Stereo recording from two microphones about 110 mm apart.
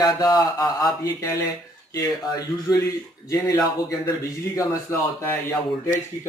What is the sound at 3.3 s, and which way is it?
Speech, 30° left (ahead or behind).